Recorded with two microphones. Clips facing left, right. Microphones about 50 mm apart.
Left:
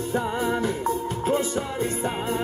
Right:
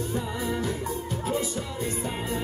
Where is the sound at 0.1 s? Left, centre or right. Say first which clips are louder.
Left 5 dB; left.